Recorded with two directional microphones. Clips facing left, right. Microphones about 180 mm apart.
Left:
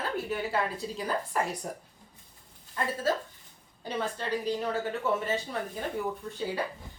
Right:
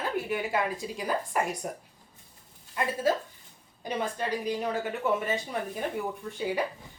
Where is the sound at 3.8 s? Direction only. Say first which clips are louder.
Right 2 dB; 15° right (ahead or behind).